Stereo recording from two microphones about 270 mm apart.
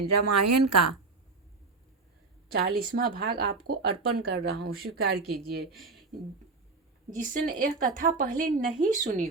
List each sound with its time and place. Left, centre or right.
0.1 s a woman's voice: right
2.5 s speech: right
5.7 s speech: centre
7.1 s a woman's voice: right